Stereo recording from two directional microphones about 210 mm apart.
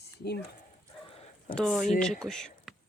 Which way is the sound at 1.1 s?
25° left (ahead or behind).